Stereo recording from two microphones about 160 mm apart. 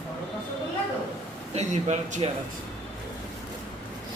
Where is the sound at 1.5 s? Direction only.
50° right (ahead or behind).